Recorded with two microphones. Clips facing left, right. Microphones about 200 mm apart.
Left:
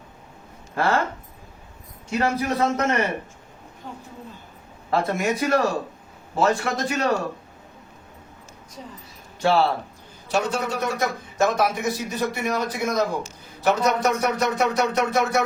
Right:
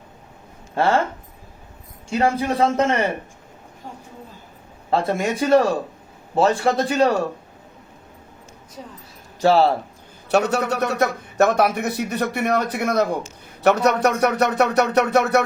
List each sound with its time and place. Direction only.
0.8 s a man's voice: 30° right (ahead or behind)
2.0 s a man's voice: 30° right (ahead or behind)
4.9 s a man's voice: 30° right (ahead or behind)
9.4 s a man's voice: 40° right (ahead or behind)
10.3 s a man's voice: 65° right (ahead or behind)